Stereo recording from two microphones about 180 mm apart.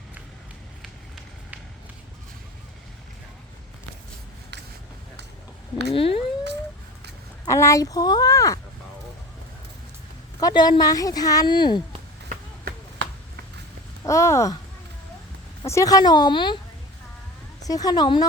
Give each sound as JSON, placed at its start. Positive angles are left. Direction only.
{"t": 5.9, "sound": "a sound", "side_deg": 30}
{"t": 7.4, "sound": "speech", "side_deg": 15}
{"t": 10.4, "sound": "speech", "side_deg": 25}
{"t": 14.0, "sound": "speech", "side_deg": 15}
{"t": 15.6, "sound": "speech", "side_deg": 15}
{"t": 17.7, "sound": "speech", "side_deg": 20}